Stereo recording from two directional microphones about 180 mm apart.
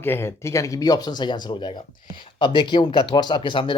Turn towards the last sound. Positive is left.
turn(degrees=25)  # may be behind; listen again after turning